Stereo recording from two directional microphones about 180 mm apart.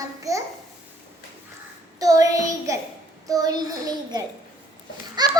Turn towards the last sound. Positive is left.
turn(degrees=-20)  # may be behind; listen again after turning